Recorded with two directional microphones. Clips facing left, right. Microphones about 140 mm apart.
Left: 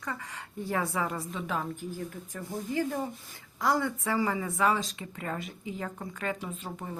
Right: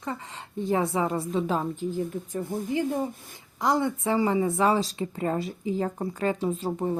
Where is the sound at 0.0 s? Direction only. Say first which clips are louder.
Right 4 dB; 25° right (ahead or behind).